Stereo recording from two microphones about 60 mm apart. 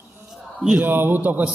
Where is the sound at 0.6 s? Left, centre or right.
Centre.